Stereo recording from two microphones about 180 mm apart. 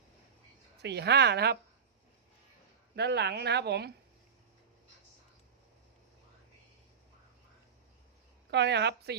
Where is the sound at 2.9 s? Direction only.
70° right (ahead or behind).